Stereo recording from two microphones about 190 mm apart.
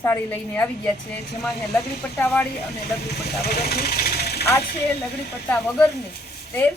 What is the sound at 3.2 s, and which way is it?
Speech, 55° left (ahead or behind).